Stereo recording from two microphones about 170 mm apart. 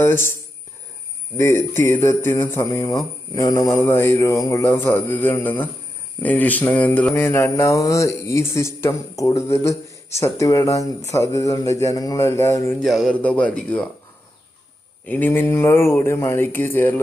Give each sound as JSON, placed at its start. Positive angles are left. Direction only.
{"t": 0.0, "sound": "mantra", "side_deg": 15}
{"t": 1.4, "sound": "mantra", "side_deg": 15}
{"t": 12.8, "sound": "mantra", "side_deg": 0}
{"t": 15.0, "sound": "mantra", "side_deg": 10}